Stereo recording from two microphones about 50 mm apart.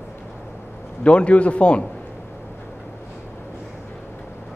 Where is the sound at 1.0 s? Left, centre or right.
Left.